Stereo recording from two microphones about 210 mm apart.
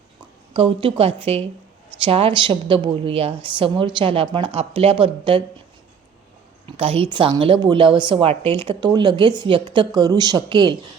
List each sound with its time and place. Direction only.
0.5 s a woman's voice: 25° right (ahead or behind)
6.7 s a woman's voice: 25° right (ahead or behind)